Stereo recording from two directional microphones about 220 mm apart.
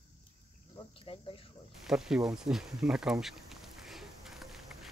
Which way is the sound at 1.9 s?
Centre (ahead or behind).